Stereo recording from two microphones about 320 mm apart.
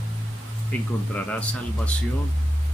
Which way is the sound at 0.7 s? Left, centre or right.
Centre.